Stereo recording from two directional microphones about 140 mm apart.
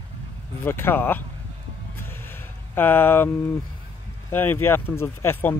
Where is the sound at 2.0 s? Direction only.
15° left (ahead or behind).